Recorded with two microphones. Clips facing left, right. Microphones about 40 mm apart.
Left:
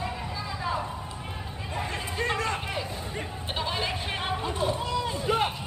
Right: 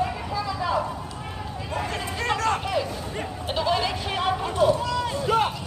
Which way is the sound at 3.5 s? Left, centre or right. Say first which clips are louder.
Right 6 dB; left.